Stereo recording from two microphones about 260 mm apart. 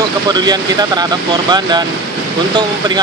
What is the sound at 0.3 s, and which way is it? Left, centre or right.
Speech, centre.